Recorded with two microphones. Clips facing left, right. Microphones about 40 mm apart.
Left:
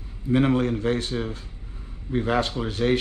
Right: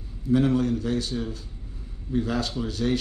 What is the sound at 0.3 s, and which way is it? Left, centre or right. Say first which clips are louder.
Speech: left 1 dB; left.